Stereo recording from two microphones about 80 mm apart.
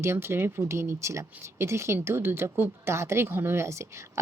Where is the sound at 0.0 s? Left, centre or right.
Right.